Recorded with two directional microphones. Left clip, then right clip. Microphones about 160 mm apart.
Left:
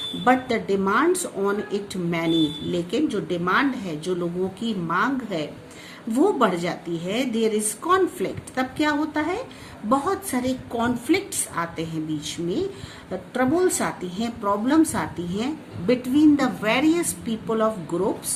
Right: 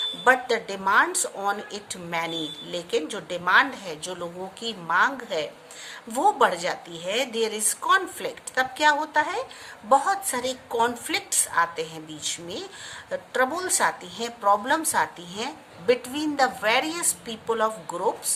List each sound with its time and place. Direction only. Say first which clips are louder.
0.3 s a woman's voice: left 1 dB; 40° right (ahead or behind)